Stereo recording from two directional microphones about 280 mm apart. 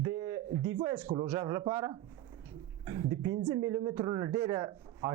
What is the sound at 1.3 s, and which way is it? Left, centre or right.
Speech, centre.